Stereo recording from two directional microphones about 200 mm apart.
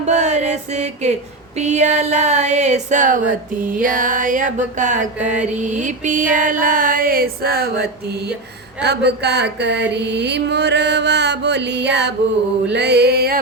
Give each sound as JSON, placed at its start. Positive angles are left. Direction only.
{"t": 0.0, "sound": "music", "side_deg": -35}
{"t": 1.5, "sound": "a sound", "side_deg": -35}
{"t": 8.8, "sound": "mantra", "side_deg": -55}